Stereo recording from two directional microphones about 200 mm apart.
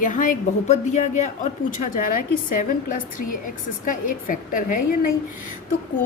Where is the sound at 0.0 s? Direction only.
40° left (ahead or behind).